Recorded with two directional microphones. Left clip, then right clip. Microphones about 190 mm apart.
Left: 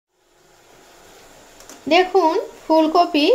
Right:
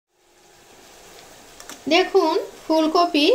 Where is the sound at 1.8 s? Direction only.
Centre (ahead or behind).